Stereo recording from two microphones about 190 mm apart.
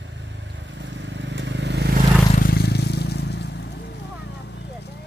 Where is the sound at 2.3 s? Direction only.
50° left (ahead or behind).